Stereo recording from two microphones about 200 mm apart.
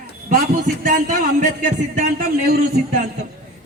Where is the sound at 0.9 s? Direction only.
40° right (ahead or behind).